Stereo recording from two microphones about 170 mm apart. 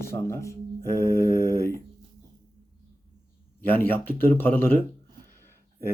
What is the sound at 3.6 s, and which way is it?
Speech, 10° left (ahead or behind).